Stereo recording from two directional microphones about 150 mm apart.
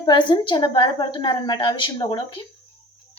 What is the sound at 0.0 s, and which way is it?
A woman's voice, 30° left (ahead or behind).